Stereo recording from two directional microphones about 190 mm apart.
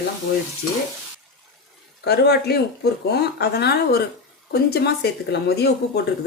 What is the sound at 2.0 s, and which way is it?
Speech, 55° left (ahead or behind).